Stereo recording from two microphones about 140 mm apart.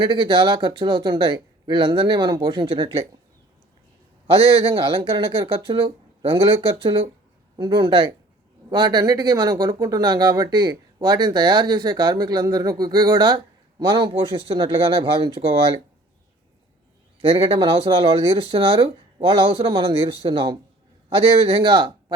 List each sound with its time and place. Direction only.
0.0 s speech: 35° right (ahead or behind)
4.7 s speech: 40° right (ahead or behind)
17.2 s speech: 40° right (ahead or behind)